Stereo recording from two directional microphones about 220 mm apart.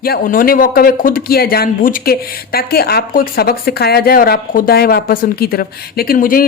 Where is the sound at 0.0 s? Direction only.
40° left (ahead or behind).